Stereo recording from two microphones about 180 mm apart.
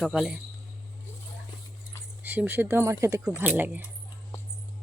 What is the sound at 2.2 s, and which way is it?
Speech, 10° right (ahead or behind).